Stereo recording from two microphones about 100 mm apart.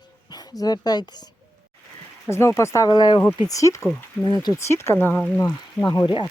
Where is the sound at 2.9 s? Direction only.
45° left (ahead or behind).